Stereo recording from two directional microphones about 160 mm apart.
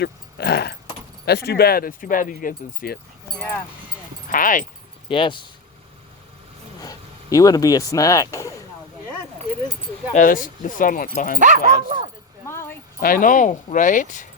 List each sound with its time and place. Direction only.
0.0 s a sound: 90° left
1.2 s speech: 90° left; by 3.0 s 65° left (ahead or behind)
3.3 s speech: 5° left (ahead or behind)
4.3 s speech: 55° left (ahead or behind)
5.0 s speech: 30° left (ahead or behind)
6.8 s speech: 20° left (ahead or behind)
10.2 s speech: 55° left (ahead or behind)
11.3 s speech: 50° right (ahead or behind)
12.5 s a sound: 15° left (ahead or behind)
13.0 s speech: 60° left (ahead or behind)